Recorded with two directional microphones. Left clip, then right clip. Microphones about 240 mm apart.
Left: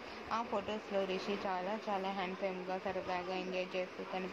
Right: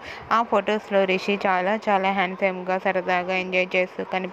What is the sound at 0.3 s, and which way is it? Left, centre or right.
A woman's voice, right.